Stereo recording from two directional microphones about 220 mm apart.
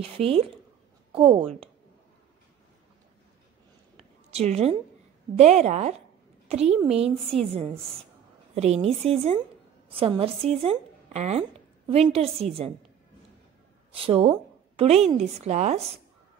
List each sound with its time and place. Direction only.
0.0 s a woman's voice: 25° right (ahead or behind)
3.9 s a sound: 30° right (ahead or behind)
5.3 s a woman's voice: 30° right (ahead or behind)
8.5 s a woman's voice: 30° right (ahead or behind)
13.9 s a woman's voice: 25° right (ahead or behind)